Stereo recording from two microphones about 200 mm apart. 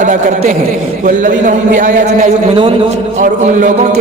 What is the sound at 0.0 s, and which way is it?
A man's voice, 40° right (ahead or behind).